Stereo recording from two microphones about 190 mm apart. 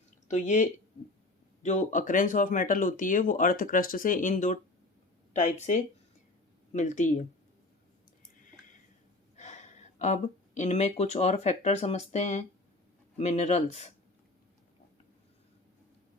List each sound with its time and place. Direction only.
0.3 s speech: 40° left (ahead or behind)
9.3 s speech: 40° left (ahead or behind)